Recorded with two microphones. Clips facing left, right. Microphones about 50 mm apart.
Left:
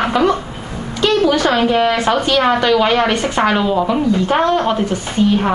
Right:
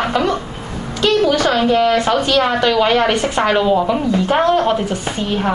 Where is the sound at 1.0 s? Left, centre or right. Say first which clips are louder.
Even; centre.